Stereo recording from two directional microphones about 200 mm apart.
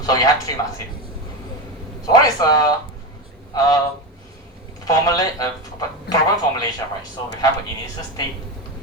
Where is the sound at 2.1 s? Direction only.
20° left (ahead or behind).